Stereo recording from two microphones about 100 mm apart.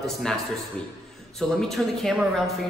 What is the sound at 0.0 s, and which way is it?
Speech, 5° left (ahead or behind).